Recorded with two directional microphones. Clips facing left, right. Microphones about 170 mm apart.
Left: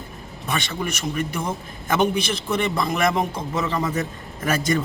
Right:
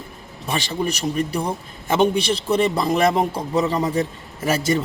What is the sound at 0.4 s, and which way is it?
A man's voice, 30° right (ahead or behind).